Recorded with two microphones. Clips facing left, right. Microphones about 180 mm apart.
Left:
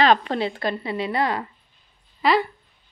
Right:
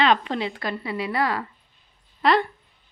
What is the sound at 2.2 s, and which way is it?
Speech, centre (ahead or behind).